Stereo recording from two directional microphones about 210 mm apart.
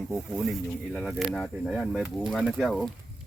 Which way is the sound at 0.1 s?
Centre (ahead or behind).